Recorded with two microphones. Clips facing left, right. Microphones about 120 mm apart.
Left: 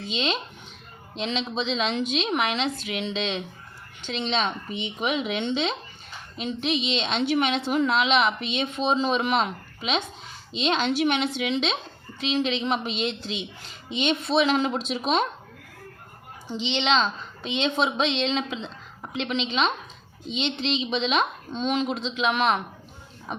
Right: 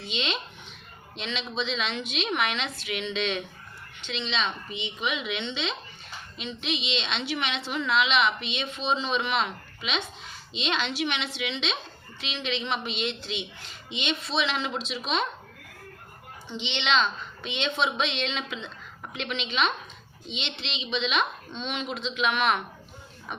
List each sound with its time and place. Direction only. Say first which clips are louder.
0.0 s a woman's voice: left 4 dB; 40° left (ahead or behind)
4.0 s a woman's voice: left 4 dB; 45° left (ahead or behind)
16.5 s a woman's voice: left 4 dB; 35° left (ahead or behind)